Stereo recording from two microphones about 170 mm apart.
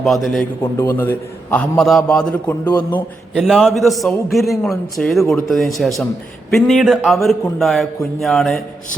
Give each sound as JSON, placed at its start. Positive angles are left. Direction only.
{"t": 0.0, "sound": "a man's voice", "side_deg": 0}
{"t": 0.6, "sound": "a man's voice", "side_deg": 15}
{"t": 2.6, "sound": "a man's voice", "side_deg": 25}
{"t": 3.3, "sound": "a man's voice", "side_deg": 0}